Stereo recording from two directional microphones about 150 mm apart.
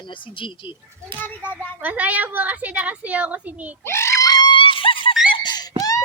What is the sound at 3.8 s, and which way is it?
Screaming, 15° left (ahead or behind).